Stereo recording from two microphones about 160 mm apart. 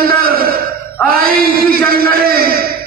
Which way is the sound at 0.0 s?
65° right (ahead or behind).